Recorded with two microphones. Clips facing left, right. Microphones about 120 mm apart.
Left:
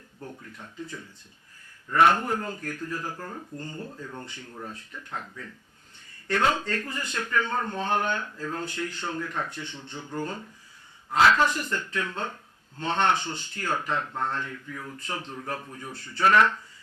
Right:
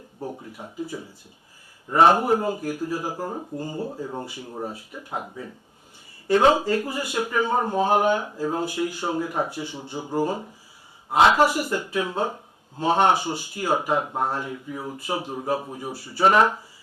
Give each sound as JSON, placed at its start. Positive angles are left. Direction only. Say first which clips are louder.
{"t": 0.5, "sound": "speech", "louder": "right 7 dB", "side_deg": -10}
{"t": 1.9, "sound": "speech", "louder": "right 4 dB", "side_deg": -25}
{"t": 2.1, "sound": "speech", "louder": "right 8 dB", "side_deg": -10}
{"t": 3.2, "sound": "speech", "louder": "right 7 dB", "side_deg": -25}
{"t": 3.6, "sound": "speech", "louder": "right 8 dB", "side_deg": -10}
{"t": 3.8, "sound": "speech", "louder": "right 8 dB", "side_deg": -35}
{"t": 4.2, "sound": "speech", "louder": "right 8 dB", "side_deg": -10}
{"t": 11.2, "sound": "speech", "louder": "right 3 dB", "side_deg": -25}
{"t": 11.4, "sound": "speech", "louder": "right 5 dB", "side_deg": -10}
{"t": 14.9, "sound": "speech", "louder": "right 8 dB", "side_deg": -10}
{"t": 16.2, "sound": "speech", "louder": "right 3 dB", "side_deg": -20}